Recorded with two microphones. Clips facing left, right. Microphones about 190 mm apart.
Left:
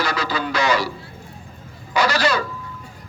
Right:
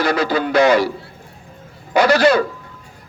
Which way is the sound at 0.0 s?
55° right (ahead or behind).